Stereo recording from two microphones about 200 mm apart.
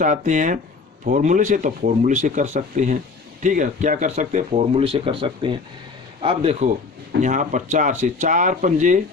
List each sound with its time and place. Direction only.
0.0 s a man's voice: 40° right (ahead or behind)